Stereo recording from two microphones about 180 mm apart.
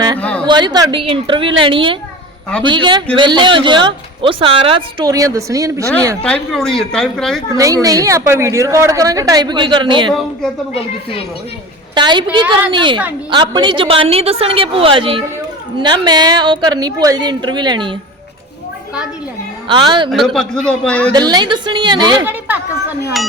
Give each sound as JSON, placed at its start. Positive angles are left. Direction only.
{"t": 0.2, "sound": "a sound", "side_deg": 5}
{"t": 0.4, "sound": "a woman's voice", "side_deg": -25}
{"t": 6.2, "sound": "speech", "side_deg": 5}
{"t": 7.5, "sound": "a woman's voice", "side_deg": -20}
{"t": 11.9, "sound": "a woman's voice", "side_deg": -25}
{"t": 19.6, "sound": "a woman's voice", "side_deg": -25}
{"t": 20.1, "sound": "speech", "side_deg": 0}
{"t": 21.1, "sound": "a woman's voice", "side_deg": -25}
{"t": 22.2, "sound": "speech", "side_deg": -10}